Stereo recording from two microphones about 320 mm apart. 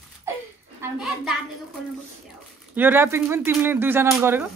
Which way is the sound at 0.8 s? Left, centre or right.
Centre.